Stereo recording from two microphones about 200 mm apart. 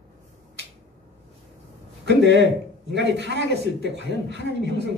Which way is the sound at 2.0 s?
60° right (ahead or behind).